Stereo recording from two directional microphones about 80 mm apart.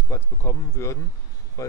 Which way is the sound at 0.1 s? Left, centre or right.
Left.